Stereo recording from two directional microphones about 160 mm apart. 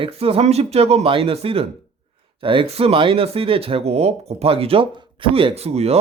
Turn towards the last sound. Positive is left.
turn(degrees=-40)  # may be behind; listen again after turning